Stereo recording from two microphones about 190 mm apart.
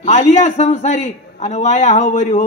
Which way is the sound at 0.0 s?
35° left (ahead or behind).